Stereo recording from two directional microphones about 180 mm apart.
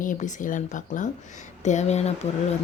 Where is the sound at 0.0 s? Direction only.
45° left (ahead or behind).